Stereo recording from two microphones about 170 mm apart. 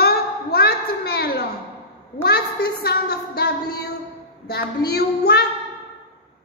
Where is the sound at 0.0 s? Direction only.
65° left (ahead or behind).